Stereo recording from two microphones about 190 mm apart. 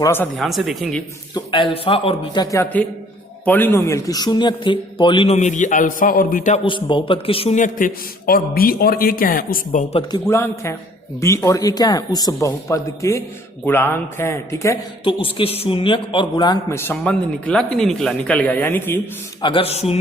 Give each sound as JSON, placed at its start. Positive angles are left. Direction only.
{"t": 0.0, "sound": "a man's voice", "side_deg": 10}
{"t": 0.3, "sound": "speech", "side_deg": 0}
{"t": 1.3, "sound": "speech", "side_deg": 25}
{"t": 6.7, "sound": "a man's voice", "side_deg": 25}
{"t": 10.2, "sound": "a man's voice", "side_deg": 15}
{"t": 15.0, "sound": "a man's voice", "side_deg": 25}
{"t": 19.4, "sound": "a man's voice", "side_deg": 25}